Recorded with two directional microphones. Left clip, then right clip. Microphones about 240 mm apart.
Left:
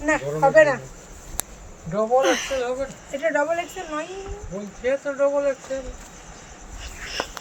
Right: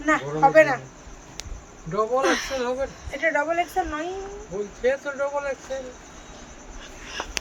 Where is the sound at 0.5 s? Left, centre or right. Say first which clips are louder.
Left 2 dB; right.